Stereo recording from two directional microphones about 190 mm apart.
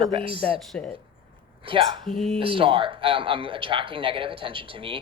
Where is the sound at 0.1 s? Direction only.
30° right (ahead or behind).